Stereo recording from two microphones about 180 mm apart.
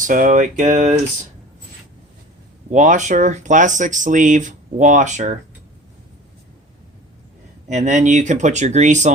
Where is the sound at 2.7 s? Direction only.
40° right (ahead or behind).